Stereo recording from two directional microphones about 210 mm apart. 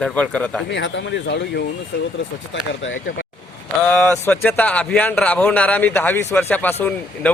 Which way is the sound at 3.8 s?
5° left (ahead or behind).